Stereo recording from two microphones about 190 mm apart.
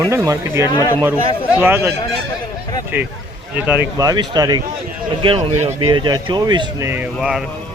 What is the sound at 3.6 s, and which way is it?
Speech, 10° right (ahead or behind).